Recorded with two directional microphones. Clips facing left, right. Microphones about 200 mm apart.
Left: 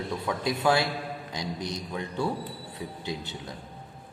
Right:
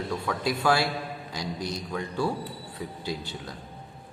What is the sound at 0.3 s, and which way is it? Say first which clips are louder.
A man's voice: even; 20° left (ahead or behind).